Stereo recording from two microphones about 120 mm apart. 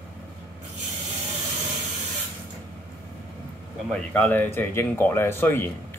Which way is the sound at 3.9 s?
10° left (ahead or behind).